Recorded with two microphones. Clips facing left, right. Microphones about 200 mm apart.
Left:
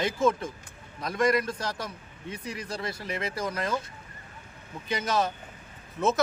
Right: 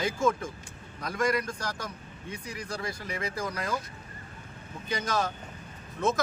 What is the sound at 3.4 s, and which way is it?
Speech, 25° left (ahead or behind).